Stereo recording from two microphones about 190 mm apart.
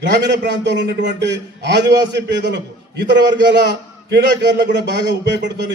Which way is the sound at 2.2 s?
65° right (ahead or behind).